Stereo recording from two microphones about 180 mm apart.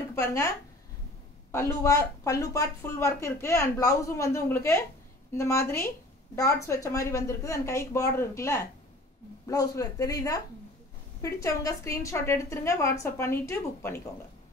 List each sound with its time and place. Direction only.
0.1 s speech: 15° left (ahead or behind)
1.5 s speech: 15° left (ahead or behind)